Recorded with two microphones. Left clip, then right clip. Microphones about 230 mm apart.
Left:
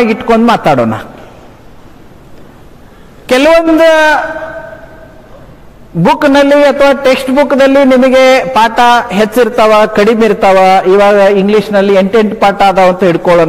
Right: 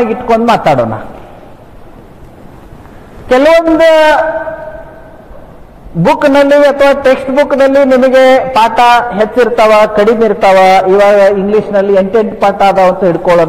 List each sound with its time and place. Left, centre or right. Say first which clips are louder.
0.0 s a man's voice: left 1 dB; left
3.3 s a man's voice: even; left
6.0 s a man's voice: even; left